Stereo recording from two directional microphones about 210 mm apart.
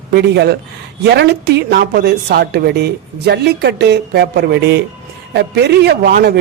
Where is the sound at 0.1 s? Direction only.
50° right (ahead or behind).